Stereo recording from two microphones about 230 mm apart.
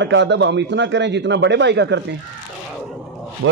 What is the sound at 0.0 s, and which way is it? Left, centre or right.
A man's voice, right.